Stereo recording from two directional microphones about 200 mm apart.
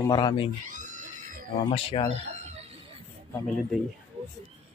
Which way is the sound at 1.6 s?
30° left (ahead or behind).